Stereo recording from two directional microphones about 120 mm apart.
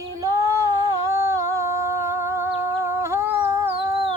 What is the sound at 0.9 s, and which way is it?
Humming, 25° right (ahead or behind).